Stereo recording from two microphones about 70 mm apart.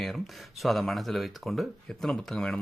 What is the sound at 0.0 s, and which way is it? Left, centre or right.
Speech, centre.